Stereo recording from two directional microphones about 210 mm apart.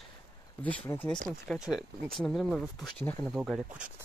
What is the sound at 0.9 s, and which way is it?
Speech, 10° left (ahead or behind).